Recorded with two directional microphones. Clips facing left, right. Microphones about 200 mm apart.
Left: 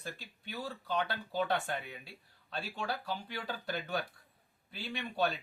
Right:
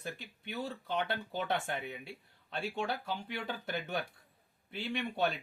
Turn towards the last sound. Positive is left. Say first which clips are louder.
# right 1 dB
turn(degrees=-20)  # may be behind; listen again after turning